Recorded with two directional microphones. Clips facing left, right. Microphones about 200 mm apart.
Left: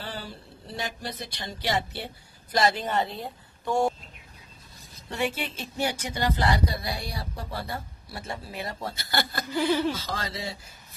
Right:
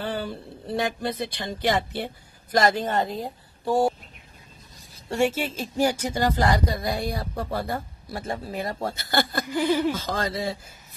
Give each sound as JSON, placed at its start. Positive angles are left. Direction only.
{"t": 0.0, "sound": "speech", "side_deg": -55}
{"t": 5.1, "sound": "speech", "side_deg": -45}
{"t": 9.5, "sound": "a sound", "side_deg": -15}
{"t": 9.9, "sound": "speech", "side_deg": -50}